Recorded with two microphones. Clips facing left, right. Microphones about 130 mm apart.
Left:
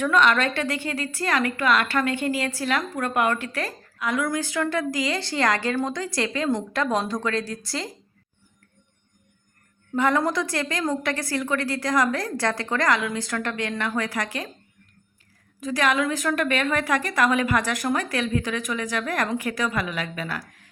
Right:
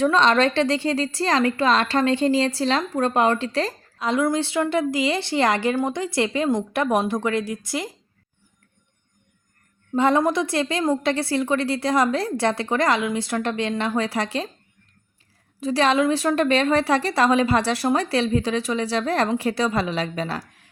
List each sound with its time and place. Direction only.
0.0 s a woman's voice: 35° right (ahead or behind)
9.9 s a woman's voice: 20° right (ahead or behind)
15.6 s a woman's voice: 30° right (ahead or behind)